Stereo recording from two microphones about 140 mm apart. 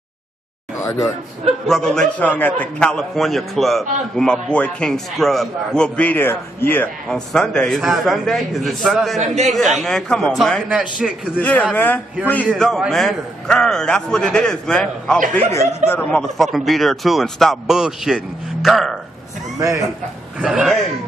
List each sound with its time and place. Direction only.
0.7 s a sound: 25° left (ahead or behind)
1.7 s a man's voice: 5° left (ahead or behind)
7.1 s a man's voice: 5° left (ahead or behind)
9.2 s speech: 55° right (ahead or behind)
9.5 s a man's voice: centre (ahead or behind)
11.3 s speech: 10° left (ahead or behind)
12.5 s a man's voice: centre (ahead or behind)
20.3 s a man's voice: 5° right (ahead or behind)